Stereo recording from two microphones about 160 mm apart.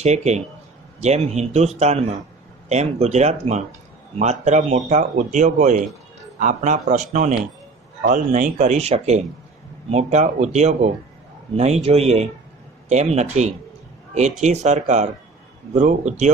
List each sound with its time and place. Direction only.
0.0 s a man's voice: 45° right (ahead or behind)